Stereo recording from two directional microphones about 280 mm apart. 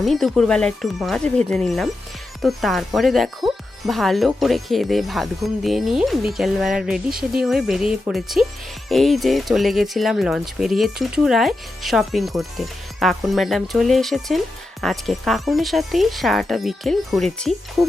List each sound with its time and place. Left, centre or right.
0.0 s speech: centre